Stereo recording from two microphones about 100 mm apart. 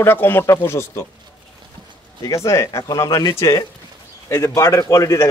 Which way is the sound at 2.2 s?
30° left (ahead or behind).